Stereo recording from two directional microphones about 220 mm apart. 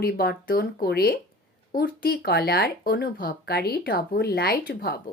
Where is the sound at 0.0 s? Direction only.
45° left (ahead or behind).